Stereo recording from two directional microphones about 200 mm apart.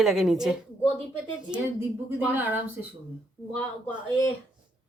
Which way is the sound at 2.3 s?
10° right (ahead or behind).